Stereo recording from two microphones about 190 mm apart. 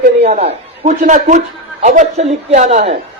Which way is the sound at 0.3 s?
35° right (ahead or behind).